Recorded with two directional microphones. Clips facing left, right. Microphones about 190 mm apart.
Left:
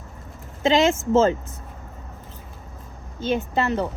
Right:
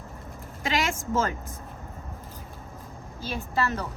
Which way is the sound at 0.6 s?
25° left (ahead or behind).